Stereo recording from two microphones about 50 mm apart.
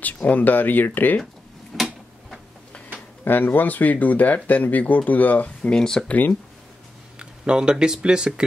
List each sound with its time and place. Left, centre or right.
0.0 s speech: left
1.7 s tick-tock: centre
3.3 s speech: left
5.6 s speech: centre
6.0 s speech: left
7.2 s speech: centre